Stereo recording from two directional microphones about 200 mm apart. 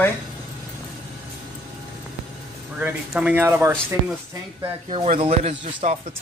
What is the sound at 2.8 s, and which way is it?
Speech, 5° right (ahead or behind).